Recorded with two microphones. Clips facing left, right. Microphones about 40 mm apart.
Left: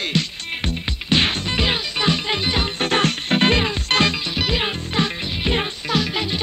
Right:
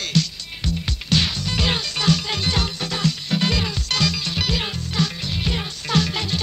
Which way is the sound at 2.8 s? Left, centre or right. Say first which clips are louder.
Left 5 dB; left.